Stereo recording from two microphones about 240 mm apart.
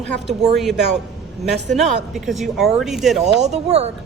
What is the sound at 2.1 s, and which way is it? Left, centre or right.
Speech, centre.